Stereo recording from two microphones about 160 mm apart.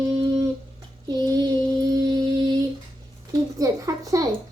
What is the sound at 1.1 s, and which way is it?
Child singing, 25° right (ahead or behind).